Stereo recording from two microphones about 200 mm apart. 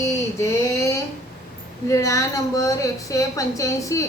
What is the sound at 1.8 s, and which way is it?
Speech, 15° left (ahead or behind).